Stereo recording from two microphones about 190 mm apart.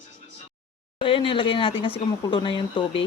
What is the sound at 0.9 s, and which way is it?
Speech, 25° left (ahead or behind).